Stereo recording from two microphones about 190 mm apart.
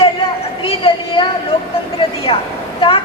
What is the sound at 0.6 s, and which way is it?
Speech, 30° left (ahead or behind).